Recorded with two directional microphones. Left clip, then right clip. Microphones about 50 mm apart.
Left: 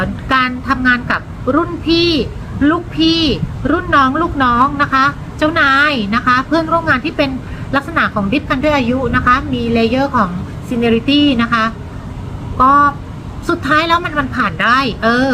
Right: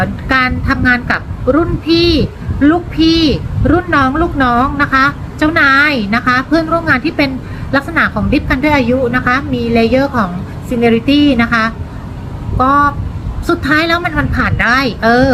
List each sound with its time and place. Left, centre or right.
0.0 s a woman's voice: left
3.7 s a woman's voice: left